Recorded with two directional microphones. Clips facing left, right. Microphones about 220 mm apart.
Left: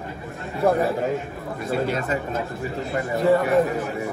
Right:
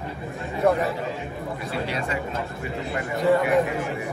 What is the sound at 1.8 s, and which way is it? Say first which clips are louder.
Speech: left 4 dB; 45° left (ahead or behind).